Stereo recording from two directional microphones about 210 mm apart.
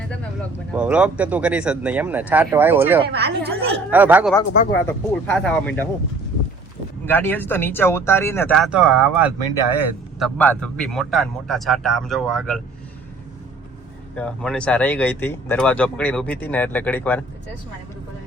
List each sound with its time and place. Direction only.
0.7 s speech: 5° right (ahead or behind)
3.1 s speech: 50° right (ahead or behind)
3.9 s speech: 10° right (ahead or behind)
4.7 s speech: 5° left (ahead or behind)
7.0 s speech: 10° left (ahead or behind); by 10.2 s 10° right (ahead or behind)
10.3 s a man's voice: 5° left (ahead or behind)
14.2 s speech: 5° left (ahead or behind)